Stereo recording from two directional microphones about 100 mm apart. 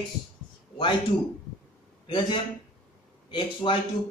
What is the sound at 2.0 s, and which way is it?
A man's voice, 60° left (ahead or behind).